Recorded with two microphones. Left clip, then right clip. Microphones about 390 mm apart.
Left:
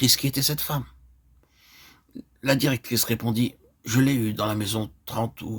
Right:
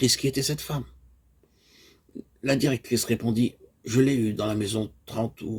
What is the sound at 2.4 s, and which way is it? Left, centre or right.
Speech, left.